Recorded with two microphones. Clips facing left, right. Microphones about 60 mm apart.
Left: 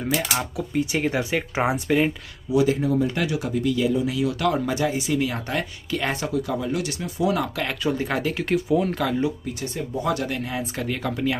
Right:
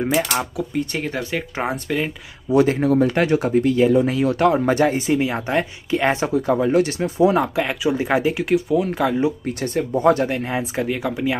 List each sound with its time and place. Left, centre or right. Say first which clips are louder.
0.1 s speech: right 4 dB; centre
2.5 s speech: right 4 dB; right
7.6 s speech: right 4 dB; centre
8.5 s speech: right 3 dB; centre
8.9 s speech: right 4 dB; centre
9.5 s speech: right 7 dB; right
10.2 s speech: right 5 dB; right
10.6 s speech: right 5 dB; centre